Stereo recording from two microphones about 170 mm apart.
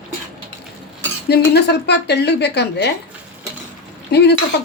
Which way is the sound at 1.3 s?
75° left (ahead or behind).